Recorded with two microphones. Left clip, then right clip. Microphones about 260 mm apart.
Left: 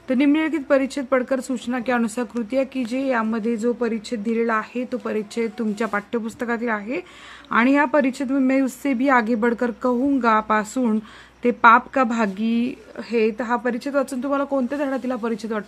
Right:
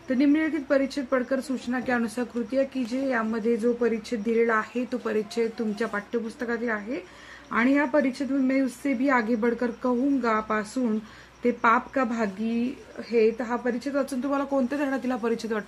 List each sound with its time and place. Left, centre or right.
0.1 s speech: left